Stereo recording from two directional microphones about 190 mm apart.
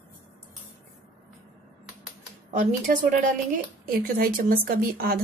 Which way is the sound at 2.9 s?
50° right (ahead or behind).